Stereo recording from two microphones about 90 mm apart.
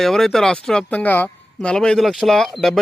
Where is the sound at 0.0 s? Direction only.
5° left (ahead or behind).